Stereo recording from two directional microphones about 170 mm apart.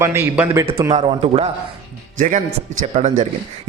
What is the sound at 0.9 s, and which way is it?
Speech, 35° right (ahead or behind).